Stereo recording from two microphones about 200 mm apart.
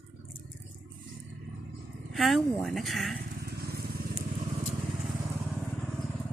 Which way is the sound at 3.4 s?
50° right (ahead or behind).